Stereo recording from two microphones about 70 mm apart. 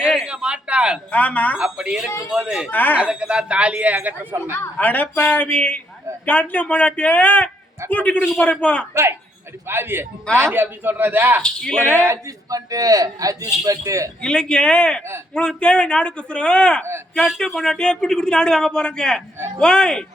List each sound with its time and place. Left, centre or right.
0.2 s a sound: centre
1.1 s a man's voice: left
1.5 s speech: centre
2.6 s a man's voice: left
2.9 s speech: centre
4.8 s a man's voice: left
9.6 s a man's voice: right
11.4 s a man's voice: centre
11.9 s a man's voice: right
12.5 s a man's voice: right
14.2 s a man's voice: centre